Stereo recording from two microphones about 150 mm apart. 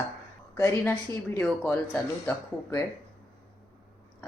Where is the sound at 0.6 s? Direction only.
15° left (ahead or behind).